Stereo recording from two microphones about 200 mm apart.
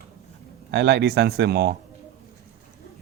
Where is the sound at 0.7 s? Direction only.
55° right (ahead or behind).